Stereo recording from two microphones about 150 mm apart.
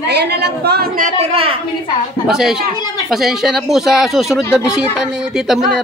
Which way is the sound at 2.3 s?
5° right (ahead or behind).